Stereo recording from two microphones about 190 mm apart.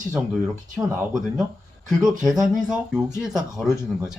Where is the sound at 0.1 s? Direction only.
5° right (ahead or behind).